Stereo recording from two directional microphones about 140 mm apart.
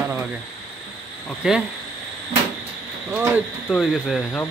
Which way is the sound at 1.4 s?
5° right (ahead or behind).